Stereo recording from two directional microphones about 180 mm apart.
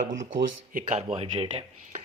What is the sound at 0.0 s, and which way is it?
Speech, 45° right (ahead or behind).